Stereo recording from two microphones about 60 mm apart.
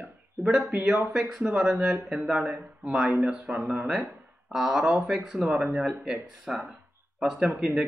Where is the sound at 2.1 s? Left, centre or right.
Centre.